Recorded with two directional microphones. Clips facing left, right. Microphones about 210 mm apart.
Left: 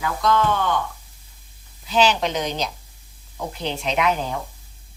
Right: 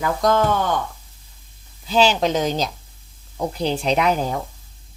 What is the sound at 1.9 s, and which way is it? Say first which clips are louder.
Speech: right 2 dB; 35° right (ahead or behind).